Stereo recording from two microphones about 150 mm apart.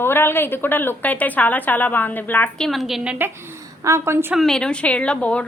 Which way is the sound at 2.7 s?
Centre (ahead or behind).